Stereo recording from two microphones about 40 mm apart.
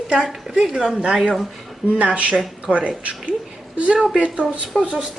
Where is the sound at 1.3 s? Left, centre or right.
Centre.